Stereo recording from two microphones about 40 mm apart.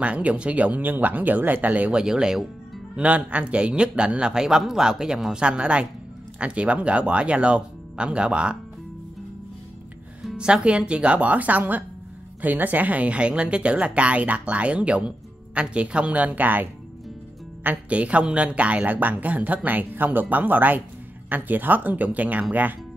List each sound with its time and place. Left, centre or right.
0.0 s speech: right
1.9 s speech: right
3.0 s speech: right
10.3 s a woman's voice: right
17.8 s a woman's voice: right